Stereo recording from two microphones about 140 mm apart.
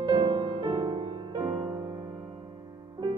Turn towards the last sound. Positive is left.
turn(degrees=-30)  # may be behind; listen again after turning